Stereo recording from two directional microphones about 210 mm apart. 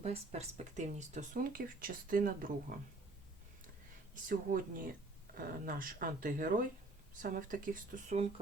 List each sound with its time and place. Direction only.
0.0 s speech: 30° right (ahead or behind)
4.1 s speech: 40° right (ahead or behind)